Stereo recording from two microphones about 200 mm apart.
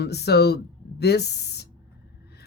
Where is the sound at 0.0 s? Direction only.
55° left (ahead or behind).